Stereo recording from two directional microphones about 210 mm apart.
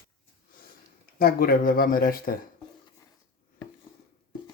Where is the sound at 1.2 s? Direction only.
45° left (ahead or behind).